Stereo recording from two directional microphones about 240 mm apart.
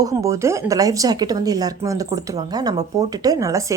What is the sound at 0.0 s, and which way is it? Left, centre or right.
A woman's voice, centre.